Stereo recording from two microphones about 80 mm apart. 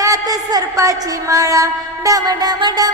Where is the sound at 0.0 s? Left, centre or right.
Right.